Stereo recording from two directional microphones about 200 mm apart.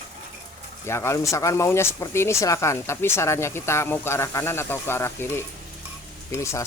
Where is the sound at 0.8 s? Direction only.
15° left (ahead or behind).